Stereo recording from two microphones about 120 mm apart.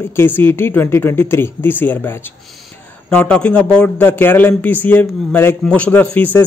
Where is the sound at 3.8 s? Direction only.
20° left (ahead or behind).